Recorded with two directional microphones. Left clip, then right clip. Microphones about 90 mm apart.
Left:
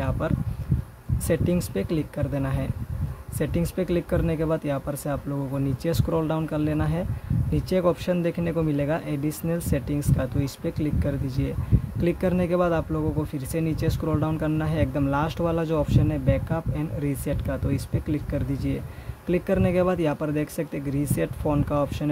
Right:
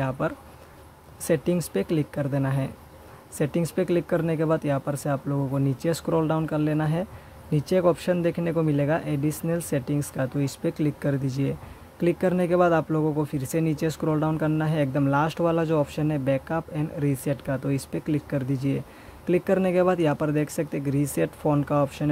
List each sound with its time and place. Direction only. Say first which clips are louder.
0.2 s speech: even; 20° right (ahead or behind)